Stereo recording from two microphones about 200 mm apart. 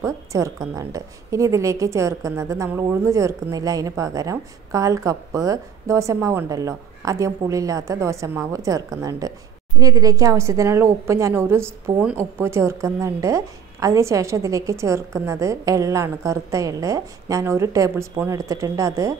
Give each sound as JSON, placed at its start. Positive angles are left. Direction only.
{"t": 0.0, "sound": "a woman's voice", "side_deg": -15}